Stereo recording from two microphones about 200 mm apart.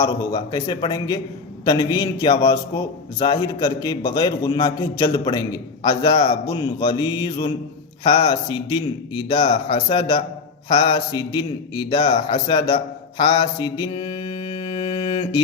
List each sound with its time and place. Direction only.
0.0 s a man's voice: 15° left (ahead or behind)
6.1 s a man's voice: 30° left (ahead or behind)
12.3 s a man's voice: 20° left (ahead or behind)
12.7 s mantra: 20° left (ahead or behind)